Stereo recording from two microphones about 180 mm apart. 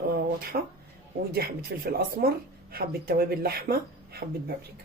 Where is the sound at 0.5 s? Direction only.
50° right (ahead or behind).